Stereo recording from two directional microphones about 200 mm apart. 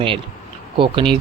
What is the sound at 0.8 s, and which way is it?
Speech, 25° right (ahead or behind).